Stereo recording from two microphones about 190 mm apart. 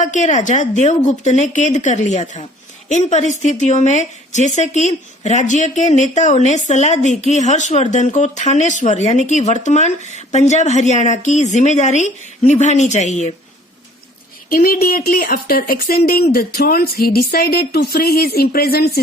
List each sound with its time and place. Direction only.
0.0 s a woman's voice: 40° left (ahead or behind)
14.5 s speech: 50° left (ahead or behind)